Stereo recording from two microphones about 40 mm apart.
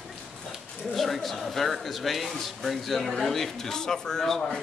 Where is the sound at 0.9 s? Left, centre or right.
Centre.